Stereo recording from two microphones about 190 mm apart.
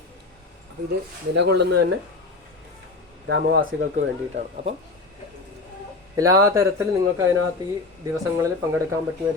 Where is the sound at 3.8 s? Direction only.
45° right (ahead or behind).